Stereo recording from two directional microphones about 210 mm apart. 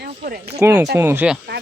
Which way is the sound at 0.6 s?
15° right (ahead or behind).